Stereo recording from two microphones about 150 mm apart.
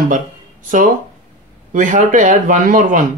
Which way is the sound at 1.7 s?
60° right (ahead or behind).